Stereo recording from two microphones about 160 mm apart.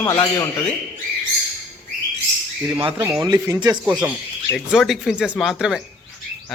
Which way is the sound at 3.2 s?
25° right (ahead or behind).